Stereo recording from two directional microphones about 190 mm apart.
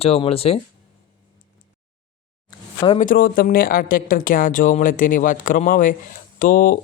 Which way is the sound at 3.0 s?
45° left (ahead or behind).